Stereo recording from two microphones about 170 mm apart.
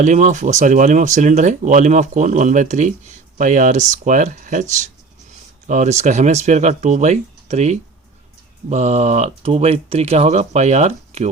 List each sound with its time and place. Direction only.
0.0 s speech: 45° right (ahead or behind)
5.6 s speech: 45° right (ahead or behind)